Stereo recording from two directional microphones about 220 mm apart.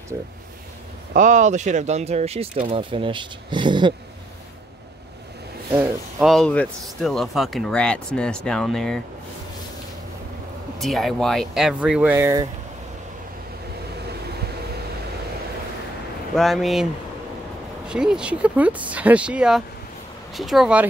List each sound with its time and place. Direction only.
1.1 s speech: 35° right (ahead or behind)
6.1 s speech: centre (ahead or behind)
10.8 s speech: centre (ahead or behind)
16.3 s speech: centre (ahead or behind)
17.8 s speech: 5° right (ahead or behind)